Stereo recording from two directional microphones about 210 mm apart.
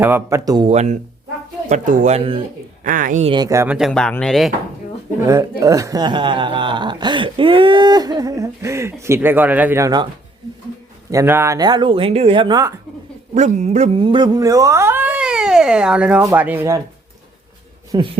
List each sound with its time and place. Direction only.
0.0 s speech: 10° right (ahead or behind)
0.7 s speech: 30° right (ahead or behind)
2.8 s speech: 40° right (ahead or behind)
3.3 s speech: 15° right (ahead or behind)
3.8 s speech: centre (ahead or behind)
5.2 s speech: 15° right (ahead or behind)
11.1 s speech: 15° right (ahead or behind)
13.3 s speech: 35° right (ahead or behind); by 16.8 s 10° right (ahead or behind)
17.9 s speech: 20° right (ahead or behind)